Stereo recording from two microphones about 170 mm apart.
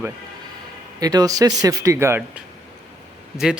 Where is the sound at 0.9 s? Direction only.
20° right (ahead or behind).